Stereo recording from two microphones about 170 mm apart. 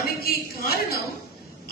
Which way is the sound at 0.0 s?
65° left (ahead or behind).